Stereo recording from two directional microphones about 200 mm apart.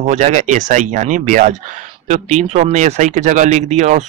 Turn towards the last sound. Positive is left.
turn(degrees=-35)  # may be behind; listen again after turning